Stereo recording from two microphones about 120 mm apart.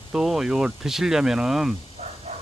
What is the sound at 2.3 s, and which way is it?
Vehicle, 60° right (ahead or behind).